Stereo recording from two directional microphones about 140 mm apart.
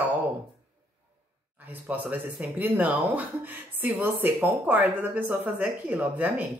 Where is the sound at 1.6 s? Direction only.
10° right (ahead or behind).